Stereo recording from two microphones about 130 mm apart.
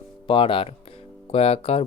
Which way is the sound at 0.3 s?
40° left (ahead or behind).